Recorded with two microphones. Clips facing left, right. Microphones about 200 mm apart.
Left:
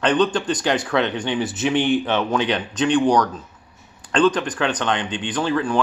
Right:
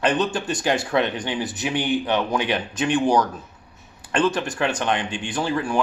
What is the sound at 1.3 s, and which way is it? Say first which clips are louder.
Speech: left 7 dB; centre (ahead or behind).